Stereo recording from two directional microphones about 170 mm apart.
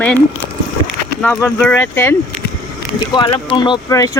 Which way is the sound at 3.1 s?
30° left (ahead or behind).